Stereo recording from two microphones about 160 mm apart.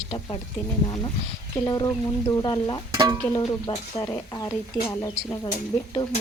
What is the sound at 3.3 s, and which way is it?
Speech, 25° left (ahead or behind).